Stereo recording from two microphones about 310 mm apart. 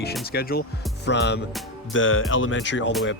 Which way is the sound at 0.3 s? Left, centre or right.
Left.